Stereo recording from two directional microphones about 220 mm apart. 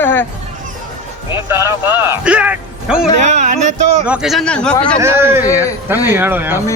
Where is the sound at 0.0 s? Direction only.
10° left (ahead or behind).